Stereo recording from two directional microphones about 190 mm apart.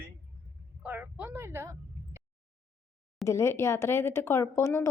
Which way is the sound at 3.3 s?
15° left (ahead or behind).